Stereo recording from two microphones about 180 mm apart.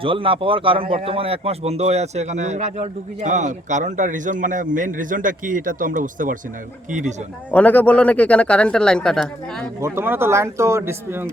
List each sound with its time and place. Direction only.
0.0 s a man's voice: 30° right (ahead or behind); by 6.3 s 45° right (ahead or behind)
7.5 s speech: 10° left (ahead or behind)
9.8 s speech: 10° right (ahead or behind)